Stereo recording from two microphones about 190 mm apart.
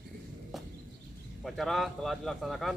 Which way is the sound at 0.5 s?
Centre (ahead or behind).